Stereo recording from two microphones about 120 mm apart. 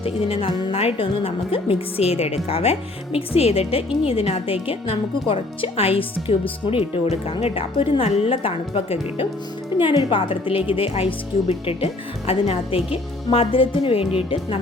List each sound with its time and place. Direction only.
0.0 s a woman's voice: 50° left (ahead or behind)